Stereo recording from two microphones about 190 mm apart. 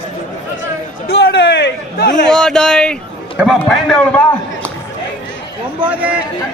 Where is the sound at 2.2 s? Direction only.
5° left (ahead or behind).